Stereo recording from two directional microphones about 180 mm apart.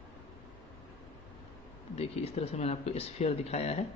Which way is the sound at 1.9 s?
35° left (ahead or behind).